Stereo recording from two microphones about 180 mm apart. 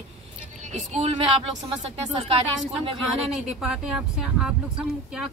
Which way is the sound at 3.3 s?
Centre (ahead or behind).